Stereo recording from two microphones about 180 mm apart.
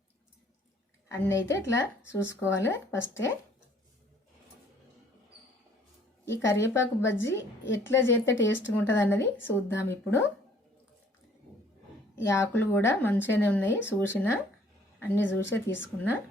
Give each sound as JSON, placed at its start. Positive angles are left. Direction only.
{"t": 1.0, "sound": "a woman's voice", "side_deg": 15}
{"t": 6.2, "sound": "a woman's voice", "side_deg": 15}
{"t": 8.4, "sound": "speech", "side_deg": 90}
{"t": 8.7, "sound": "a woman's voice", "side_deg": 10}
{"t": 12.2, "sound": "a woman's voice", "side_deg": 15}